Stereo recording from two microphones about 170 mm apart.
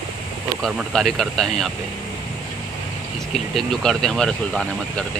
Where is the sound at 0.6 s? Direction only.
Centre (ahead or behind).